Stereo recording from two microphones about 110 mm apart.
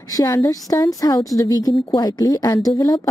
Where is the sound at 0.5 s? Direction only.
30° left (ahead or behind).